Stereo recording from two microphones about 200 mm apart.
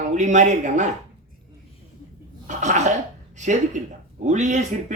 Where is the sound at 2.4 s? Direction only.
40° right (ahead or behind).